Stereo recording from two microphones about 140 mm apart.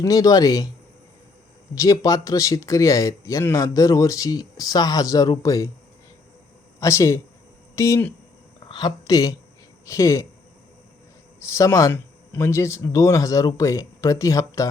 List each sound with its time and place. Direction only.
0.0 s speech: 25° left (ahead or behind)
1.7 s speech: 25° left (ahead or behind)
6.7 s speech: 20° left (ahead or behind)
11.3 s speech: 20° left (ahead or behind)